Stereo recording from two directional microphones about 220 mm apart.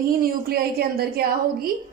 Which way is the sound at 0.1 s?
40° right (ahead or behind).